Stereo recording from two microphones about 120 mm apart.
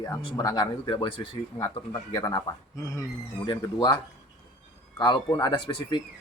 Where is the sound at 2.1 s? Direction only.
35° left (ahead or behind).